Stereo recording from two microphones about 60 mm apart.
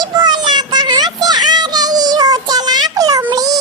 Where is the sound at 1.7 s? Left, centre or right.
Right.